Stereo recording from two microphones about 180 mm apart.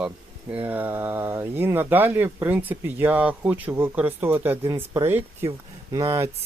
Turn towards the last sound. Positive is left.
turn(degrees=-15)  # may be behind; listen again after turning